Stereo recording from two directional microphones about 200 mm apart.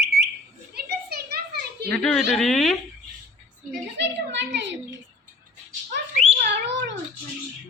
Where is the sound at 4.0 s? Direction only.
60° right (ahead or behind).